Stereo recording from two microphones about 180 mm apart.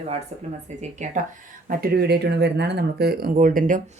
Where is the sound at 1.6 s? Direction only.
60° right (ahead or behind).